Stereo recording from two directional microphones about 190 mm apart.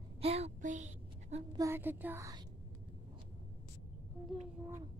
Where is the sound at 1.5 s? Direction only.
15° right (ahead or behind).